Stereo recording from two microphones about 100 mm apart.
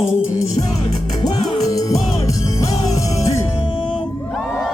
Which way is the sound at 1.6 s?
35° left (ahead or behind).